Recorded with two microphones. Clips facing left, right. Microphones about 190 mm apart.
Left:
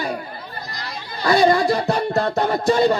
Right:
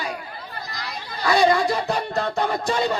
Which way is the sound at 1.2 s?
40° left (ahead or behind).